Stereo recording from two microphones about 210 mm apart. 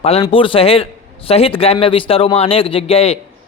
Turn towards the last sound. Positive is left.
turn(degrees=30)  # may be behind; listen again after turning